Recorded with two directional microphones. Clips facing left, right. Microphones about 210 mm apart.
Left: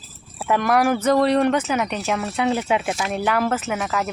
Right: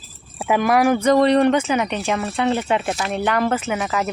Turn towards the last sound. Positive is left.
turn(degrees=0)  # may be behind; listen again after turning